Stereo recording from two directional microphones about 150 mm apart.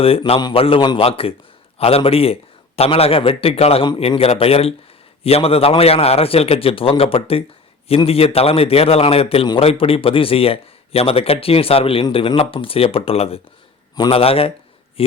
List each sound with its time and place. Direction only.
0.0 s a man's voice: 40° left (ahead or behind)